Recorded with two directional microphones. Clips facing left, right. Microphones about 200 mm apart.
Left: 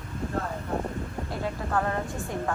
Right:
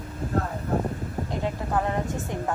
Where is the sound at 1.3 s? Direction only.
15° right (ahead or behind).